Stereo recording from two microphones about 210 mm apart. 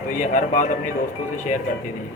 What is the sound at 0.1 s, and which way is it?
Speech, 40° left (ahead or behind).